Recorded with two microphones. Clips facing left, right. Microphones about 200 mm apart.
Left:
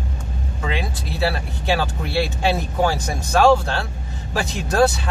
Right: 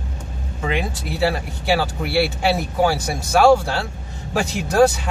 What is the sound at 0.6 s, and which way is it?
Speech, 15° right (ahead or behind).